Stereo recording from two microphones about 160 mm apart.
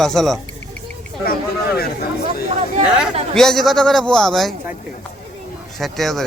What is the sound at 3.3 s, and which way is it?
Speech, 5° left (ahead or behind).